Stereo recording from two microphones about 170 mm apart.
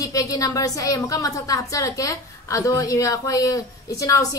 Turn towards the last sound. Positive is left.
turn(degrees=20)  # may be behind; listen again after turning